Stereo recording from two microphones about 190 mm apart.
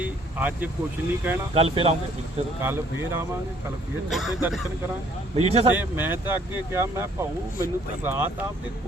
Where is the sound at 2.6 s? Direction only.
10° right (ahead or behind).